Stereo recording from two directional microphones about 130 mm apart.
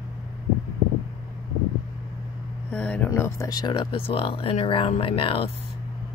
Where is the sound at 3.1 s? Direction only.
20° left (ahead or behind); by 5.5 s 45° left (ahead or behind).